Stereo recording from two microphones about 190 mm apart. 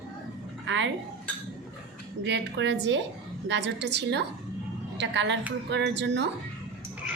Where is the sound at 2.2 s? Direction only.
70° right (ahead or behind).